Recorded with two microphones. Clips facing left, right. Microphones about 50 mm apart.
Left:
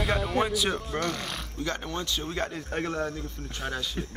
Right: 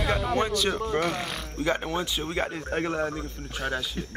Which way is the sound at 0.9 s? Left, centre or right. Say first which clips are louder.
Right 4 dB; centre.